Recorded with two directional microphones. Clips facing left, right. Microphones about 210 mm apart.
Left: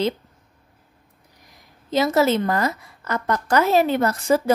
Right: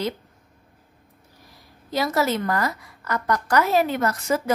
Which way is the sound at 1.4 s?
20° left (ahead or behind).